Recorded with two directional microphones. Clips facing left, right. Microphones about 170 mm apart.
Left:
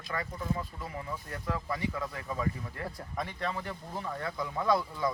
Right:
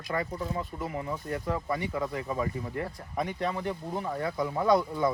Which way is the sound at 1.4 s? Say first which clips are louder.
Even; 25° right (ahead or behind).